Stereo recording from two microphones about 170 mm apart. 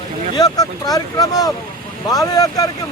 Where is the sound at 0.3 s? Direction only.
20° left (ahead or behind).